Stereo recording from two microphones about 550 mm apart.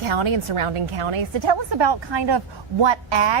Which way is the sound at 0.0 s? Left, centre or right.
Right.